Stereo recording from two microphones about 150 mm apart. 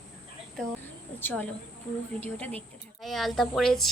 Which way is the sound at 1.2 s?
10° left (ahead or behind).